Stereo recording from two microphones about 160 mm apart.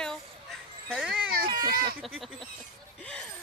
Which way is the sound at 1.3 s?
65° right (ahead or behind).